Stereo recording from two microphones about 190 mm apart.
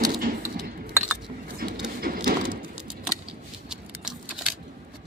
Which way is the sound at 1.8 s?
45° right (ahead or behind).